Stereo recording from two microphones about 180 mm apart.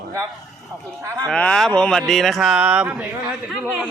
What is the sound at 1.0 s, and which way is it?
Speech, 20° right (ahead or behind).